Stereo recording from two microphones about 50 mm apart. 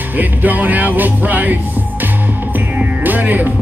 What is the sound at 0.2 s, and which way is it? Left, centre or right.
Music, right.